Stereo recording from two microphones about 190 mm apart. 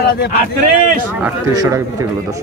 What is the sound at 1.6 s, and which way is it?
Speech, 15° right (ahead or behind).